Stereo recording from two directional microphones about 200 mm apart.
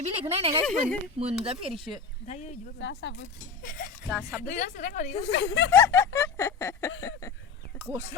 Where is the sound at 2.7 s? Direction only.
65° left (ahead or behind).